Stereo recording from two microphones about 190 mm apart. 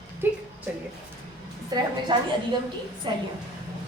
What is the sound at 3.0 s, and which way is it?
Speech, 25° right (ahead or behind).